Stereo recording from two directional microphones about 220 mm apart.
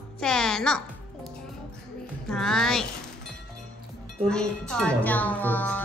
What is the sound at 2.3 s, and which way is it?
Speech, centre (ahead or behind).